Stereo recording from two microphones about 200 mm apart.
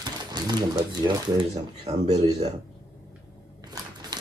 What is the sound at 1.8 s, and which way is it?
Speech, 30° right (ahead or behind).